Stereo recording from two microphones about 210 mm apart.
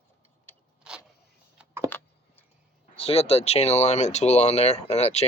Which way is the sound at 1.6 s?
10° right (ahead or behind).